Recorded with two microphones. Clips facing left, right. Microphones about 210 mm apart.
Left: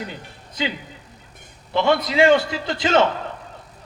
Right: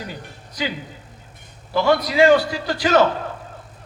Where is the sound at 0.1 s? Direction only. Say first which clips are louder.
Right 2 dB; 25° left (ahead or behind).